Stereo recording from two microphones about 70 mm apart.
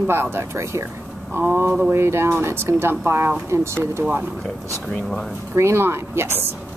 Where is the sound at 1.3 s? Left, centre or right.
Right.